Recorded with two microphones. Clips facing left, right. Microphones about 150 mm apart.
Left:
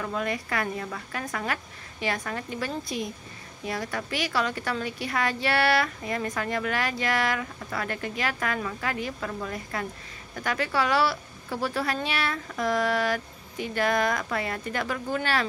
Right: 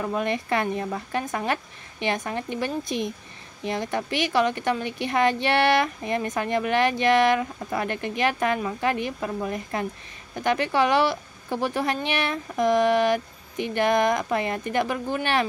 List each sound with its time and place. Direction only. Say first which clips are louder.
0.0 s speech: right 4 dB; 25° right (ahead or behind)